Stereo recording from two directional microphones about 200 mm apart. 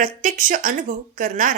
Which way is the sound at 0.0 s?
40° right (ahead or behind).